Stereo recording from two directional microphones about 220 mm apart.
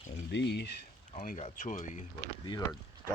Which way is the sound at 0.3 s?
50° left (ahead or behind).